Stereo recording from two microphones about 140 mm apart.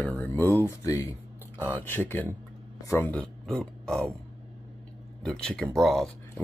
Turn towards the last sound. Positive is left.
turn(degrees=0)  # may be behind; listen again after turning